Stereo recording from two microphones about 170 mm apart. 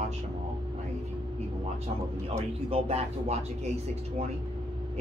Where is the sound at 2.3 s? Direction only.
35° right (ahead or behind).